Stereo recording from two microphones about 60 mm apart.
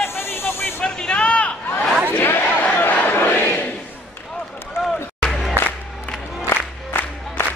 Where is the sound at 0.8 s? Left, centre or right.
Centre.